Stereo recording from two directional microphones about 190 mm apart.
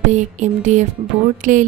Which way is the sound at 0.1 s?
40° right (ahead or behind).